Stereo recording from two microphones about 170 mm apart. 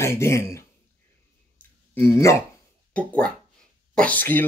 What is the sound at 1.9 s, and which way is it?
Speech, 15° left (ahead or behind).